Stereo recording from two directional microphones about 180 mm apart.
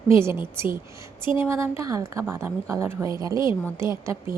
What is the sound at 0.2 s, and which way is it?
A woman's voice, 15° right (ahead or behind).